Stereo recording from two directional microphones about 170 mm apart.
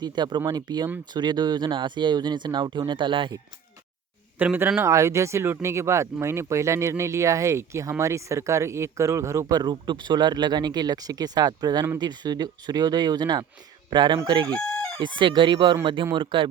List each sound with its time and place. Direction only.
0.0 s speech: 25° right (ahead or behind)
4.4 s speech: 10° right (ahead or behind)
14.8 s chicken: 5° left (ahead or behind)
15.2 s speech: 30° right (ahead or behind)